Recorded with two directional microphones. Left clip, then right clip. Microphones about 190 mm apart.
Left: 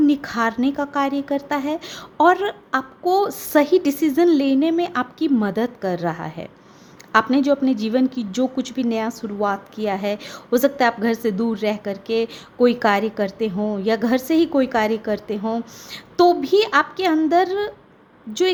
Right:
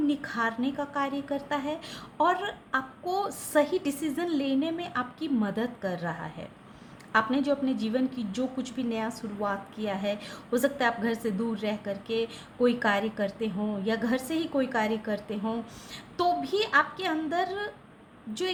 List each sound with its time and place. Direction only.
0.0 s a woman's voice: 45° left (ahead or behind)